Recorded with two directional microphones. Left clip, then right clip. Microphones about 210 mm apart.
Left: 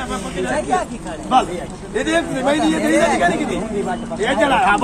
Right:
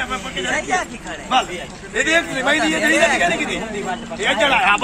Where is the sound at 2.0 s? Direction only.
10° right (ahead or behind).